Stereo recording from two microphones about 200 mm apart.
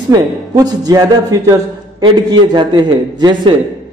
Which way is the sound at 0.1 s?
20° right (ahead or behind).